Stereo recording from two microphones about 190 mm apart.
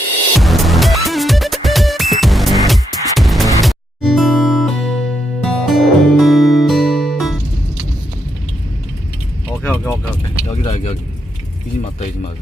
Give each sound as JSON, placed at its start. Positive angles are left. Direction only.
{"t": 0.3, "sound": "music", "side_deg": 0}
{"t": 9.6, "sound": "vehicle", "side_deg": 10}
{"t": 10.5, "sound": "speech", "side_deg": 35}